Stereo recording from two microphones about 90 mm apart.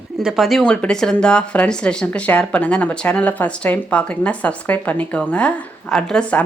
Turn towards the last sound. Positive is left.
turn(degrees=10)  # may be behind; listen again after turning